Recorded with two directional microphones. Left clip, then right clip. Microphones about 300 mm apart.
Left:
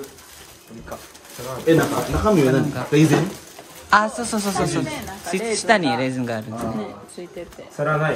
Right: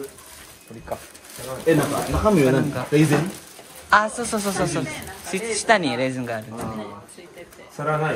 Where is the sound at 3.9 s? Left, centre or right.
Centre.